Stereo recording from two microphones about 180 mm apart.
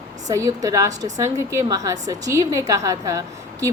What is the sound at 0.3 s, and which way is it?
A woman's voice, 20° right (ahead or behind).